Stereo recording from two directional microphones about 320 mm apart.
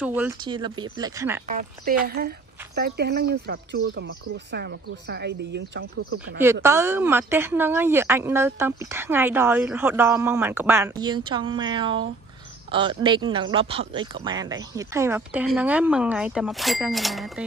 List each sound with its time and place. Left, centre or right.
0.0 s speech: centre
1.5 s speech: right
6.4 s speech: centre